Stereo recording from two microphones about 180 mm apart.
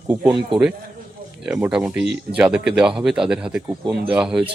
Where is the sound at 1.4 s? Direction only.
5° right (ahead or behind).